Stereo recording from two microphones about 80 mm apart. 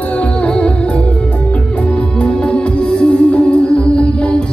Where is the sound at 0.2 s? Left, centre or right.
Centre.